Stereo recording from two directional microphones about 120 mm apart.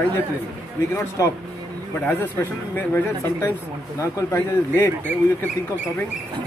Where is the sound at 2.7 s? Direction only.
20° left (ahead or behind).